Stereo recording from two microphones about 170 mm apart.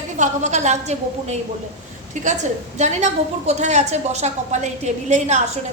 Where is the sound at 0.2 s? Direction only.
45° right (ahead or behind).